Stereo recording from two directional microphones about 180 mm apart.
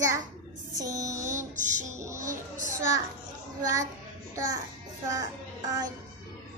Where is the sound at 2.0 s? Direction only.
15° right (ahead or behind).